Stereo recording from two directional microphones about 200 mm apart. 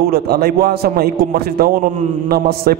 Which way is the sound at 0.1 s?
50° right (ahead or behind).